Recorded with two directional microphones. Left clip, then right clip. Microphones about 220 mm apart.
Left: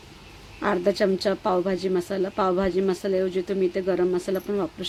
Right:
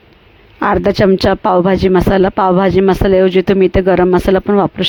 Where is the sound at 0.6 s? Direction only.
40° right (ahead or behind).